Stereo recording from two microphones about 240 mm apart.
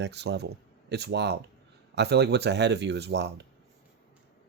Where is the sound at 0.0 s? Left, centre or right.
Right.